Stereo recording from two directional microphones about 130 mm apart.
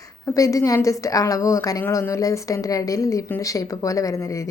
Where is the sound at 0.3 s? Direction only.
25° left (ahead or behind).